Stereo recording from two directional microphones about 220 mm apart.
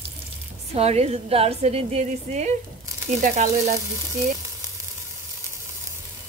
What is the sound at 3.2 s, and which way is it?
Sizzle, 35° right (ahead or behind).